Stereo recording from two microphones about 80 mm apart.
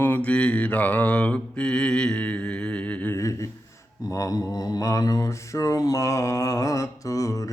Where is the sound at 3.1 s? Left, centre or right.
Left.